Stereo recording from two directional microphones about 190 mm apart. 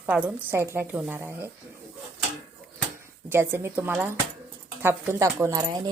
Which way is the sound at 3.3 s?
10° right (ahead or behind).